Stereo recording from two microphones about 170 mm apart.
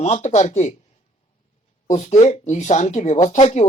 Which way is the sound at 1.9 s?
40° left (ahead or behind).